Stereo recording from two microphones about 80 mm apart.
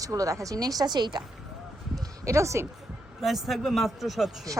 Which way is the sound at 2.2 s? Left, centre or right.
Right.